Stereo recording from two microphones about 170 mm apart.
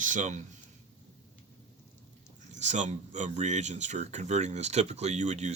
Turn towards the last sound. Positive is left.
turn(degrees=-40)  # may be behind; listen again after turning